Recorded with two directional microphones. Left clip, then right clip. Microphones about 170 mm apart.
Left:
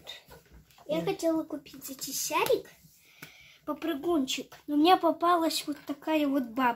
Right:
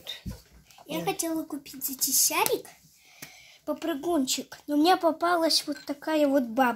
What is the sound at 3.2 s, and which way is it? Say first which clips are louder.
Speech: right 3 dB; 30° right (ahead or behind).